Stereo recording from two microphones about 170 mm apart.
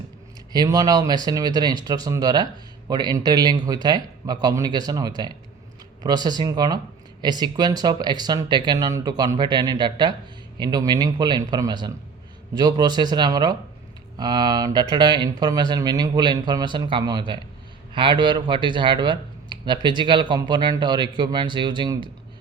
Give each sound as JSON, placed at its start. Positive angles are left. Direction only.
{"t": 0.5, "sound": "speech", "side_deg": -20}